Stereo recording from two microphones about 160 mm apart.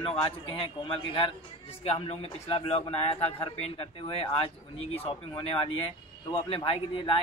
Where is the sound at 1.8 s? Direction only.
40° left (ahead or behind).